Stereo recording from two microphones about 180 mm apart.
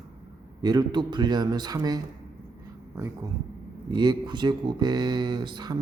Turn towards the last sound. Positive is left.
turn(degrees=-25)  # may be behind; listen again after turning